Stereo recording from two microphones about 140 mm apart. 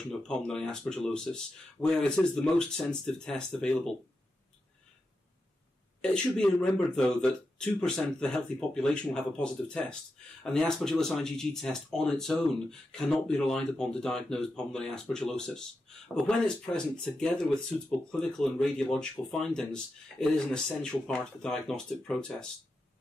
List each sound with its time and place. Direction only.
0.2 s speech: 5° left (ahead or behind)
5.9 s speech: 5° left (ahead or behind)